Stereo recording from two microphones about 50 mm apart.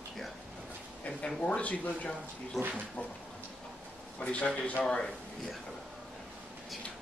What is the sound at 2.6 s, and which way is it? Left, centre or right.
Speech, centre.